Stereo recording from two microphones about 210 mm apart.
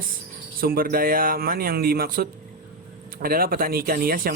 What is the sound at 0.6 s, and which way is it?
Speech, 45° right (ahead or behind).